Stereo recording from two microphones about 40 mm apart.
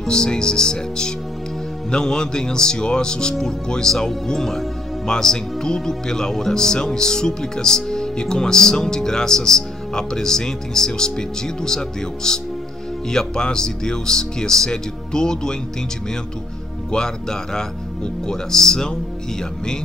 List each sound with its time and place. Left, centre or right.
0.0 s speech: centre
16.9 s speech: centre